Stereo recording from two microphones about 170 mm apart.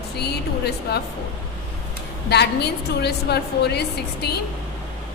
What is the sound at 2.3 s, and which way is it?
A woman's voice, 75° left (ahead or behind).